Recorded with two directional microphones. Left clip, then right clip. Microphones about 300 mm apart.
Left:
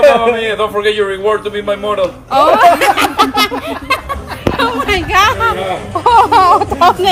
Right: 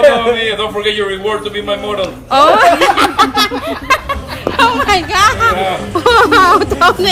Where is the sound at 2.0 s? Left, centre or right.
Centre.